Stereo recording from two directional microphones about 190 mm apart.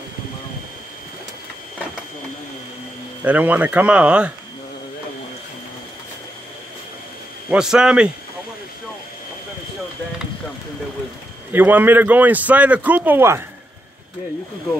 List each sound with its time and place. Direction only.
3.3 s a man's voice: 10° right (ahead or behind)
7.4 s a man's voice: 5° right (ahead or behind)
11.5 s a man's voice: 10° right (ahead or behind)